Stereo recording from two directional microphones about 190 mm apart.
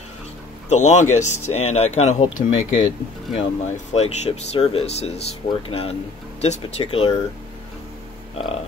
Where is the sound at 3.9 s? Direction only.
35° left (ahead or behind).